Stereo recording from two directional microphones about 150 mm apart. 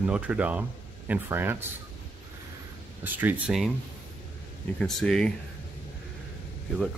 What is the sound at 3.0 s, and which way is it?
Speech, 10° right (ahead or behind).